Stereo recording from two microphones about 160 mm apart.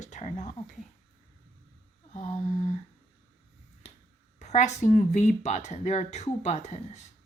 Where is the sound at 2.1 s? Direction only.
45° left (ahead or behind).